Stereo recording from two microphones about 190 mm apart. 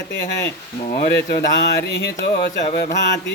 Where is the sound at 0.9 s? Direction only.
50° left (ahead or behind).